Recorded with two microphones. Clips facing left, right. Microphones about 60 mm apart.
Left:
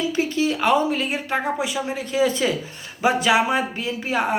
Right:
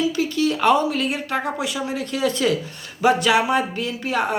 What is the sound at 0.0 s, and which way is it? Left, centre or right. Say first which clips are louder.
Speech: right 1 dB; left.